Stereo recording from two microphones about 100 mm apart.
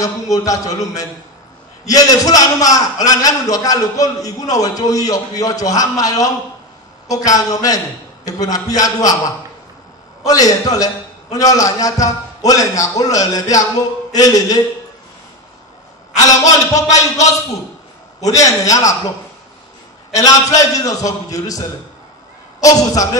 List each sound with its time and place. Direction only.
0.0 s a man's voice: 35° left (ahead or behind)
10.2 s a man's voice: 35° left (ahead or behind)
16.3 s a man's voice: 35° left (ahead or behind)
18.3 s a man's voice: 35° left (ahead or behind)
20.2 s a man's voice: 35° left (ahead or behind)